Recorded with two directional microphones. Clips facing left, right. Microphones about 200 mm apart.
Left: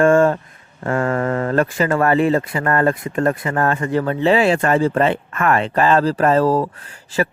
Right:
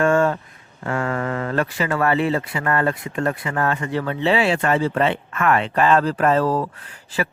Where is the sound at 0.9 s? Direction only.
45° left (ahead or behind).